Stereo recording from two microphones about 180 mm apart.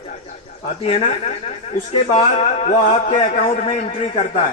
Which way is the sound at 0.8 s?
35° left (ahead or behind).